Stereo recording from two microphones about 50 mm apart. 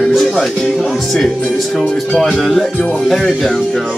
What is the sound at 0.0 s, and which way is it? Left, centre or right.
Music, centre.